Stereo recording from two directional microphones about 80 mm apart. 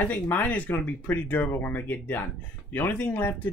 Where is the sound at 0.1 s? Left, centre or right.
Left.